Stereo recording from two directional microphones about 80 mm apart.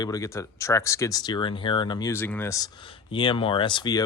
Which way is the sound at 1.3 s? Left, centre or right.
Left.